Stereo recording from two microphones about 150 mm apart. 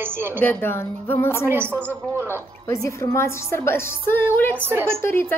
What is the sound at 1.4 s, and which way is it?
Speech, 15° right (ahead or behind).